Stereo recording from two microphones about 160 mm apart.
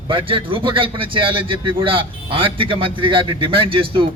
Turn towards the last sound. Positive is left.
turn(degrees=-35)  # may be behind; listen again after turning